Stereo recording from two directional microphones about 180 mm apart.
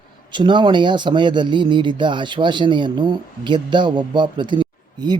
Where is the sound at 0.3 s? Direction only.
25° right (ahead or behind).